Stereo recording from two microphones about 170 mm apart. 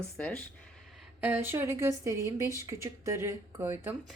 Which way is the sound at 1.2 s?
15° right (ahead or behind).